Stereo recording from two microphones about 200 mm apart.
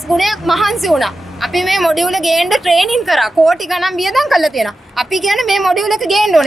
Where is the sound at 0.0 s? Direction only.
Centre (ahead or behind).